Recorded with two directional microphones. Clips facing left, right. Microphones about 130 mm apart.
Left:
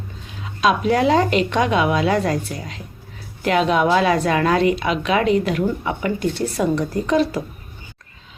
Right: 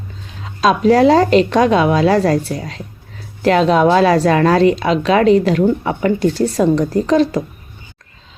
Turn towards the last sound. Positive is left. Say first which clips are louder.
# right 5 dB
turn(degrees=-35)  # may be behind; listen again after turning